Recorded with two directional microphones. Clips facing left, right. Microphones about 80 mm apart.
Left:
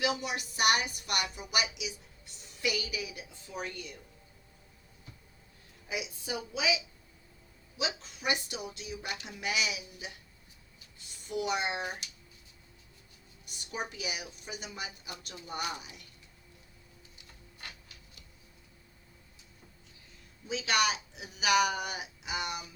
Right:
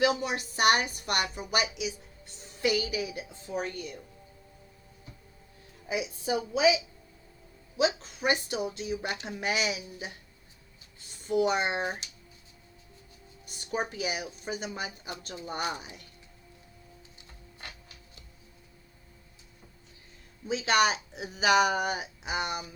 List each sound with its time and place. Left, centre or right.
0.0 s a woman's voice: right
5.9 s speech: right
11.2 s speech: right
13.4 s a sound: right
13.9 s speech: right
17.2 s tick-tock: right
20.5 s speech: right